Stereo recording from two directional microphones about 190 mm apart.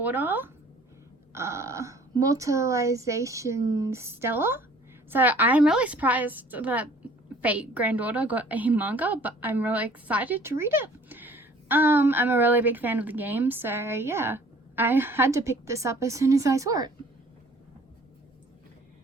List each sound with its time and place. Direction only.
0.0 s a woman's voice: 10° right (ahead or behind)